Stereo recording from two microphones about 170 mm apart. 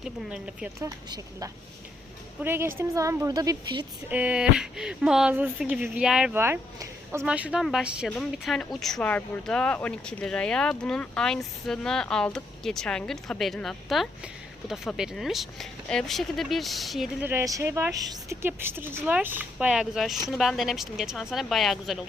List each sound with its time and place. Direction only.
0.0 s speech: 5° right (ahead or behind)
0.8 s a woman's voice: 20° right (ahead or behind)
4.1 s speech: 10° right (ahead or behind)